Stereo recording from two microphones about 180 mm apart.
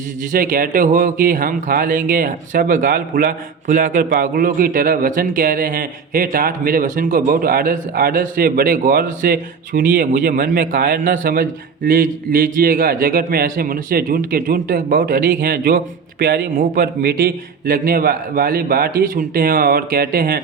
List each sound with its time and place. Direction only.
0.3 s a man's voice: 50° right (ahead or behind)